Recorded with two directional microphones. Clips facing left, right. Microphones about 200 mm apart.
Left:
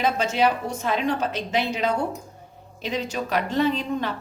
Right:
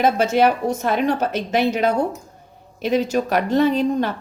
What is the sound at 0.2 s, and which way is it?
A woman's voice, 60° right (ahead or behind).